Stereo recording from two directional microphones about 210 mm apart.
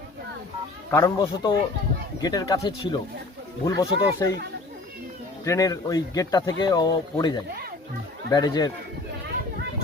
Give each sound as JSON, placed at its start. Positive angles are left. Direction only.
{"t": 0.9, "sound": "speech", "side_deg": 15}
{"t": 5.5, "sound": "speech", "side_deg": 15}